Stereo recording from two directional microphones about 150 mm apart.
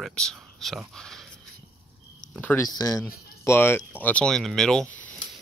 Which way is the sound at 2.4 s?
10° left (ahead or behind).